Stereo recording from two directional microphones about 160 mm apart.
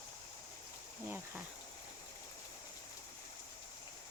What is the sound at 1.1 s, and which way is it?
Speech, 10° right (ahead or behind).